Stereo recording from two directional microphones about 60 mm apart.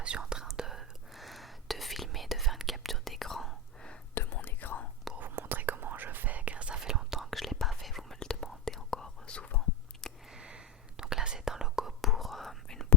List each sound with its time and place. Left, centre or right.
0.0 s whispering: centre
4.1 s whispering: left
5.3 s whispering: right; by 7.3 s centre
7.3 s whispering: centre
10.3 s whispering: centre